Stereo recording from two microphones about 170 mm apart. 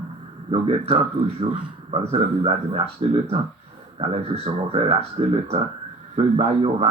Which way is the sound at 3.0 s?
35° right (ahead or behind).